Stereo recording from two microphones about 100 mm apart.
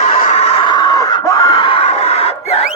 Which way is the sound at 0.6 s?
50° left (ahead or behind).